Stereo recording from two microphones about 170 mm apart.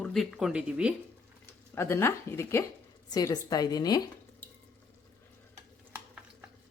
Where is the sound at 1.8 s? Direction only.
15° left (ahead or behind).